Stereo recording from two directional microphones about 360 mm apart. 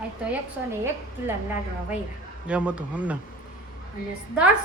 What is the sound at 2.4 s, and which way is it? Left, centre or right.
Speech, centre.